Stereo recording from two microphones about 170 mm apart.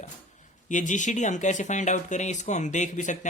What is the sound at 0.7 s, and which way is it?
Speech, 45° left (ahead or behind).